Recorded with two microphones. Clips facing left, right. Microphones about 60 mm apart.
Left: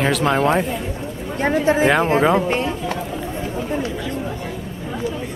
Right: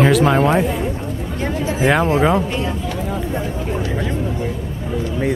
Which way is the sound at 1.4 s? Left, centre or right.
Left.